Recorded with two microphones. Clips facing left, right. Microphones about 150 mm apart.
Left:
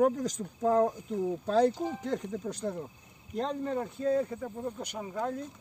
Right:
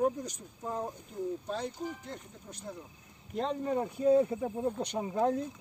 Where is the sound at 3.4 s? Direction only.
5° right (ahead or behind).